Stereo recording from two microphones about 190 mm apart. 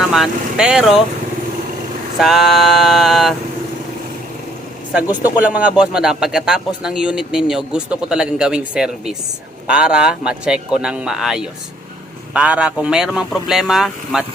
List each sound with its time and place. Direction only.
0.1 s a man's voice: centre (ahead or behind)
2.1 s a man's voice: centre (ahead or behind)
5.0 s speech: 20° left (ahead or behind)
5.4 s a man's voice: 5° right (ahead or behind)